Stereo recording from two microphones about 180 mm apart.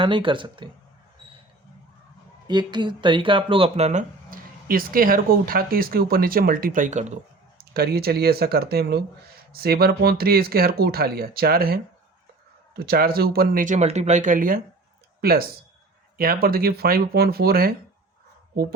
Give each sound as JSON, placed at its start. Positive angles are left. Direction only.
{"t": 0.0, "sound": "speech", "side_deg": -30}
{"t": 2.5, "sound": "speech", "side_deg": -25}
{"t": 7.6, "sound": "speech", "side_deg": -60}